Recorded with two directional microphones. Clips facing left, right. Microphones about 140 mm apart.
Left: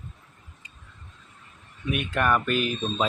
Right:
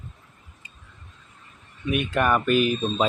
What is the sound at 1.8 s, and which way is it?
Speech, centre (ahead or behind).